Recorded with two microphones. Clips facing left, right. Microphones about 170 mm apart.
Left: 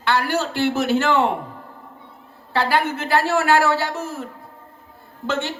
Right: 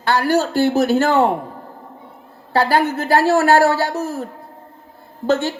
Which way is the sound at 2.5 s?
40° right (ahead or behind).